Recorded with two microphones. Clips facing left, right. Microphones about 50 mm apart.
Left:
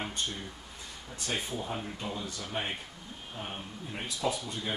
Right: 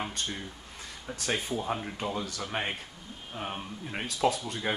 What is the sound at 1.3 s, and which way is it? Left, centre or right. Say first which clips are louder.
Speech: right 4 dB; right.